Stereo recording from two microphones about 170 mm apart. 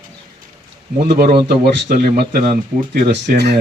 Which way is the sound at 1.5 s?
65° right (ahead or behind).